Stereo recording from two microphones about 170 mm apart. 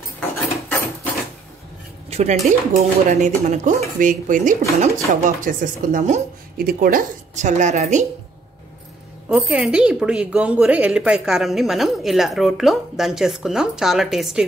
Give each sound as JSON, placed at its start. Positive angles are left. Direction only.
{"t": 0.7, "sound": "mechanisms", "side_deg": 10}
{"t": 2.0, "sound": "dishes", "side_deg": -40}
{"t": 3.1, "sound": "speech", "side_deg": -50}
{"t": 6.6, "sound": "speech", "side_deg": -55}
{"t": 9.3, "sound": "speech", "side_deg": -5}